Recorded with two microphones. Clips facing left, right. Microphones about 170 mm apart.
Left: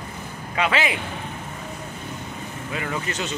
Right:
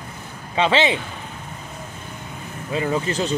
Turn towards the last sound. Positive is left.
turn(degrees=-30)  # may be behind; listen again after turning